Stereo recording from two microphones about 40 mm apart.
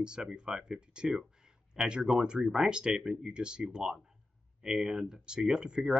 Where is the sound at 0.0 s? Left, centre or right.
Right.